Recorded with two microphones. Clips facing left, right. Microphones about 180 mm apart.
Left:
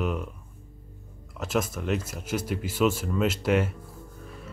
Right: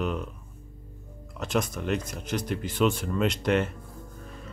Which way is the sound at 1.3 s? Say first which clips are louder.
Even; 5° left (ahead or behind).